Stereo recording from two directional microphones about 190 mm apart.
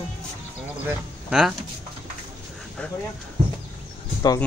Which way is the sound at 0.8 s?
5° right (ahead or behind).